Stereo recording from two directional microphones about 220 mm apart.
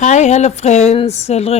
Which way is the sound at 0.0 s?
30° left (ahead or behind).